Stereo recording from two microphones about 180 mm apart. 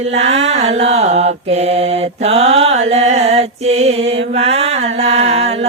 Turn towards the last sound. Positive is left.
turn(degrees=-35)  # may be behind; listen again after turning